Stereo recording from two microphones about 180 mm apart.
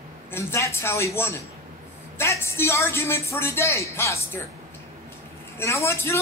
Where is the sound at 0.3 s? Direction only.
15° left (ahead or behind).